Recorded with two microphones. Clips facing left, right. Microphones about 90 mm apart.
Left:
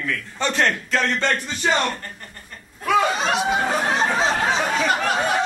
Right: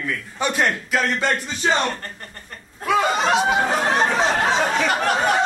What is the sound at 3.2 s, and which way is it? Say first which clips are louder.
Speech: right 2 dB; 60° right (ahead or behind).